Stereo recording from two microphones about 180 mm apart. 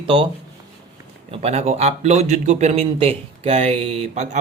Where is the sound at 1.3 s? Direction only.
35° right (ahead or behind).